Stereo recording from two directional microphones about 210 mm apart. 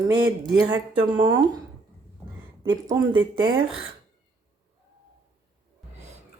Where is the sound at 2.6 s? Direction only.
15° right (ahead or behind).